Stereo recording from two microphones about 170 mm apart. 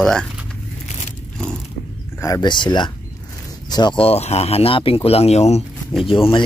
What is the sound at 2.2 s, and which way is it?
Speech, 25° left (ahead or behind).